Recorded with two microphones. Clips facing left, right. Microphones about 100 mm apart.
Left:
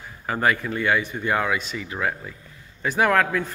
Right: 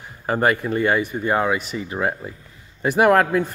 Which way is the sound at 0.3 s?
45° right (ahead or behind).